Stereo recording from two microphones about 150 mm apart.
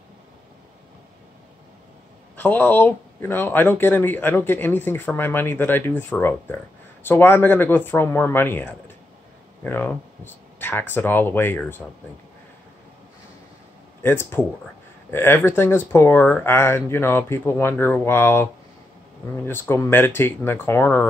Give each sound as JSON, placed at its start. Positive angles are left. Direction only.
{"t": 2.3, "sound": "a man's voice", "side_deg": 10}
{"t": 14.0, "sound": "a man's voice", "side_deg": 15}